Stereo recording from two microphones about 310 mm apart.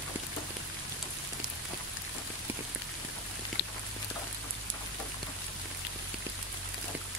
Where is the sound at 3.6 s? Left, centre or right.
Left.